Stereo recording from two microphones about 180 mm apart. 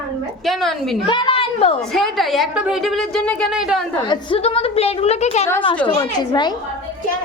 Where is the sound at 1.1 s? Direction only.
30° left (ahead or behind).